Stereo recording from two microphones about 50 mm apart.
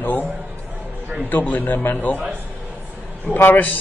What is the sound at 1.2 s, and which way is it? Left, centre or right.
Speech, left.